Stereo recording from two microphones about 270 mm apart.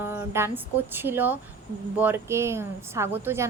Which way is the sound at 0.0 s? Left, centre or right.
Centre.